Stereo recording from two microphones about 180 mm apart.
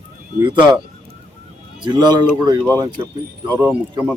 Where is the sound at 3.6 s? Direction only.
10° right (ahead or behind).